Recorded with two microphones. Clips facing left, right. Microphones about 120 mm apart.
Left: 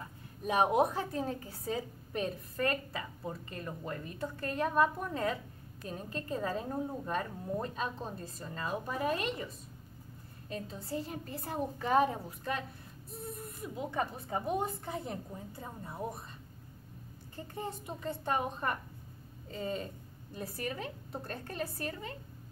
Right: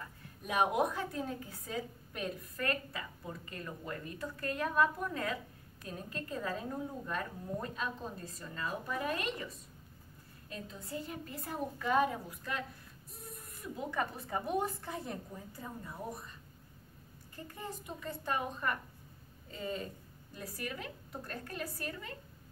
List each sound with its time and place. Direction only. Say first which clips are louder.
0.0 s a woman's voice: left 7 dB; 30° left (ahead or behind)
10.5 s a woman's voice: left 4 dB; 30° left (ahead or behind)
13.1 s a sound: left 8 dB; 25° left (ahead or behind)
13.9 s a woman's voice: left 1 dB; 25° left (ahead or behind)
17.4 s a woman's voice: left 4 dB; 25° left (ahead or behind)